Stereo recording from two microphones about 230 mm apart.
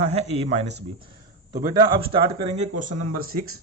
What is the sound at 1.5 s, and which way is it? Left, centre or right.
Speech, centre.